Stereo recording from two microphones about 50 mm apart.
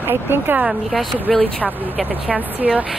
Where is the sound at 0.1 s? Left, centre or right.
Right.